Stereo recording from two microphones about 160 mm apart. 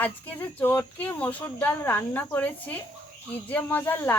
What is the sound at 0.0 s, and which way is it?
Speech, 10° left (ahead or behind).